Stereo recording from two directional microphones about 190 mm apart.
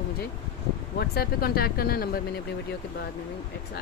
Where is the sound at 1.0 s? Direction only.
55° left (ahead or behind).